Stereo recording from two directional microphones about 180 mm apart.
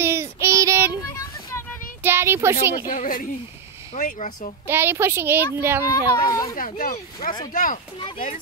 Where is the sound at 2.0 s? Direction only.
10° right (ahead or behind).